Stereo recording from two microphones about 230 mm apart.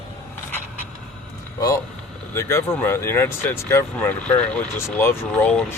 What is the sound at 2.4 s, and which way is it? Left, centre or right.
Speech, centre.